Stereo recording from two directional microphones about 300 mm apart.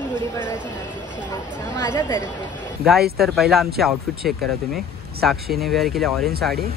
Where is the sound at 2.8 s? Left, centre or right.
Centre.